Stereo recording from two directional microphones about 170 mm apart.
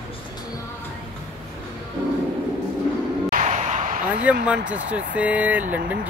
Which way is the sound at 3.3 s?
45° right (ahead or behind).